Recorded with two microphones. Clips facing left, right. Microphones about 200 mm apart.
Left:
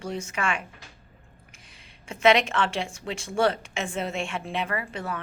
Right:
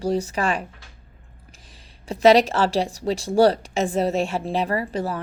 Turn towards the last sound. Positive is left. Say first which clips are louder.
# right 7 dB
turn(degrees=-35)  # may be behind; listen again after turning